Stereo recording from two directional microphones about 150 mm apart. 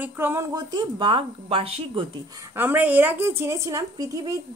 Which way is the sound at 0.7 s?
30° right (ahead or behind).